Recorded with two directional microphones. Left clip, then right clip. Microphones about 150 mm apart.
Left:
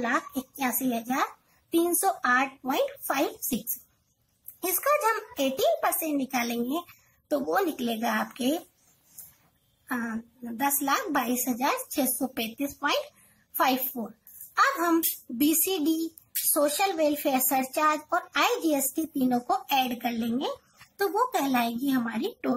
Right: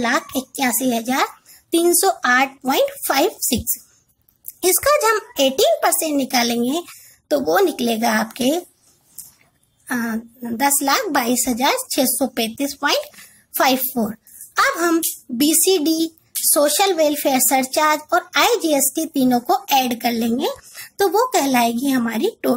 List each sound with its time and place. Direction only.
0.0 s a woman's voice: 40° right (ahead or behind)
4.8 s a woman's voice: 35° right (ahead or behind)
9.8 s a woman's voice: 35° right (ahead or behind)
16.5 s a woman's voice: 35° right (ahead or behind)